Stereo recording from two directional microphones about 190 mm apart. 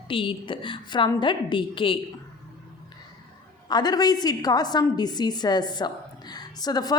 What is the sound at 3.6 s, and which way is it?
A woman's voice, 20° left (ahead or behind).